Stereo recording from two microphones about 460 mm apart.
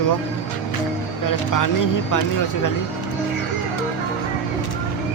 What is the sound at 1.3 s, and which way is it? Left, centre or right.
Speech, left.